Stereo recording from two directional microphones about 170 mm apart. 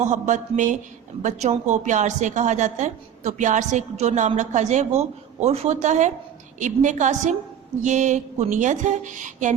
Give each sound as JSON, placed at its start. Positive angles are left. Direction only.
{"t": 0.0, "sound": "a woman's voice", "side_deg": -45}